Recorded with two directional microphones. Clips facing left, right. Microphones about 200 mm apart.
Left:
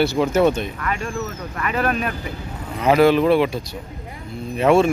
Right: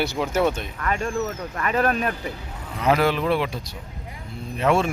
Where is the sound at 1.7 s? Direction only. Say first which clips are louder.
Even; 40° right (ahead or behind).